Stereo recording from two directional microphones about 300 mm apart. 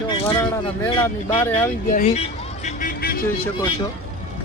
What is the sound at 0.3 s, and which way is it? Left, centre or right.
Speech, centre.